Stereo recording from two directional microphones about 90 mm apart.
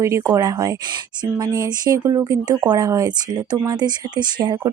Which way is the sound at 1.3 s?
50° right (ahead or behind).